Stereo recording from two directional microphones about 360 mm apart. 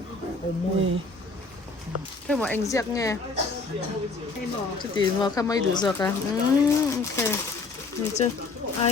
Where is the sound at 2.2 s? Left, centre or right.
Centre.